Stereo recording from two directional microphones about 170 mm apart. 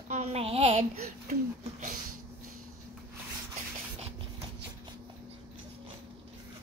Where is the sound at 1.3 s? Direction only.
50° right (ahead or behind).